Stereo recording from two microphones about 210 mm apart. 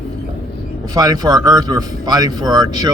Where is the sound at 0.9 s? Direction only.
20° right (ahead or behind).